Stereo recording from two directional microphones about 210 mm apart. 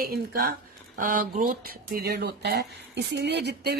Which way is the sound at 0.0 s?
45° right (ahead or behind).